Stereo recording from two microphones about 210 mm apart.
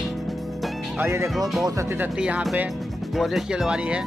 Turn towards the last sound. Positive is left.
turn(degrees=-5)  # may be behind; listen again after turning